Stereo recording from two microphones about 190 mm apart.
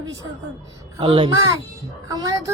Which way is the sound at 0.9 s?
25° right (ahead or behind).